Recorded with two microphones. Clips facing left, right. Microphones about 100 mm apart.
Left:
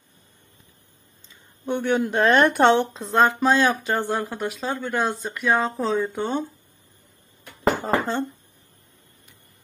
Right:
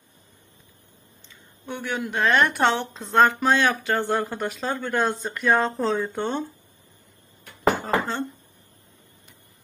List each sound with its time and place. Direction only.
1.7 s speech: 55° left (ahead or behind)
2.0 s a woman's voice: 45° left (ahead or behind)
3.1 s speech: 20° left (ahead or behind); by 6.4 s 5° left (ahead or behind)
7.8 s speech: 20° left (ahead or behind)